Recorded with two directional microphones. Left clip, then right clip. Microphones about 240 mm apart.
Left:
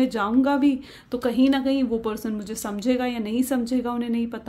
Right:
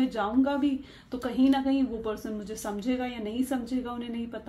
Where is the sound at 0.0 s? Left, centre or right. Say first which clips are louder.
Left 5 dB; left.